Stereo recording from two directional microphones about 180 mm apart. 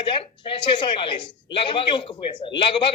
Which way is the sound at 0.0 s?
30° left (ahead or behind).